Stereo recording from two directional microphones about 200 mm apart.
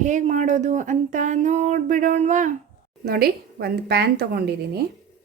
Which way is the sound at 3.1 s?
50° right (ahead or behind).